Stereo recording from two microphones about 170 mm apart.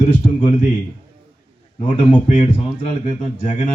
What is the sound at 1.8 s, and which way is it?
Speech, 30° left (ahead or behind).